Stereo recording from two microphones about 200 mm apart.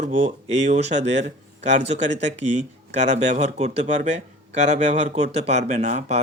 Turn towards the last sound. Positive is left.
turn(degrees=-35)  # may be behind; listen again after turning